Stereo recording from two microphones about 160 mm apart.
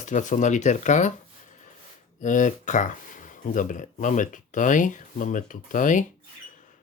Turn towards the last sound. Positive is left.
turn(degrees=55)  # may be behind; listen again after turning